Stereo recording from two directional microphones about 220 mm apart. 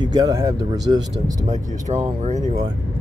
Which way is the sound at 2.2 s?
35° right (ahead or behind).